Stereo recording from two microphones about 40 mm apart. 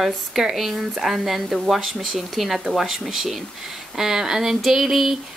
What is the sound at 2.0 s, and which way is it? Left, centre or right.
Speech, centre.